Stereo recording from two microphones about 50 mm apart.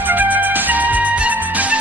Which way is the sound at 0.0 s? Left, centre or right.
Right.